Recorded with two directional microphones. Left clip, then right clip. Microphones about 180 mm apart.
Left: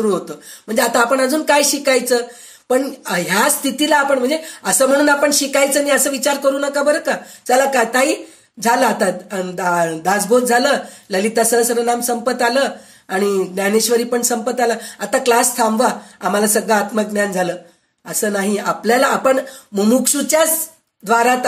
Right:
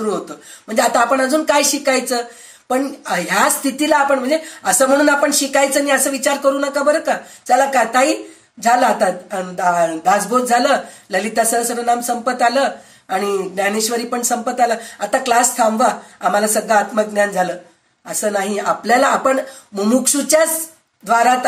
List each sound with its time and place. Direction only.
0.7 s speech: 45° left (ahead or behind)